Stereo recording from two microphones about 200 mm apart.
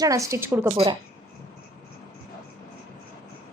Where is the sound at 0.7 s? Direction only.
25° right (ahead or behind).